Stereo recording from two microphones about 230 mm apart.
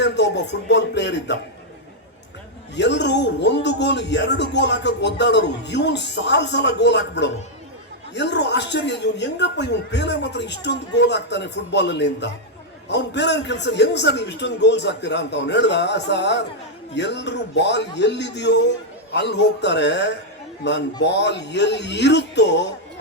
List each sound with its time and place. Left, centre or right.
0.0 s speech: left
2.7 s speech: left